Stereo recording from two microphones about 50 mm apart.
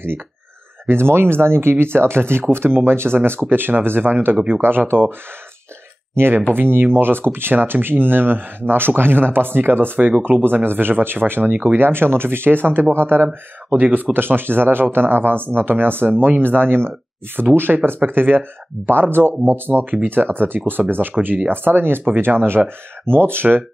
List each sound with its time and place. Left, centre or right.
0.8 s speech: right
6.1 s speech: right
14.1 s speech: right